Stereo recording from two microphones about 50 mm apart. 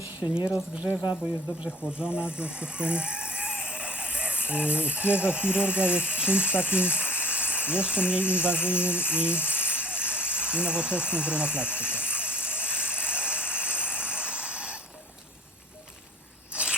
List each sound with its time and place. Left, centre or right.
0.2 s speech: left
1.9 s speech: right
8.7 s rattle: right
16.5 s scrape: right